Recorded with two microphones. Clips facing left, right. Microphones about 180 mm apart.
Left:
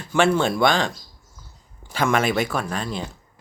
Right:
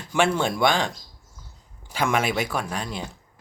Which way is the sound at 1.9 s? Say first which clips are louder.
Left 3 dB; 10° right (ahead or behind).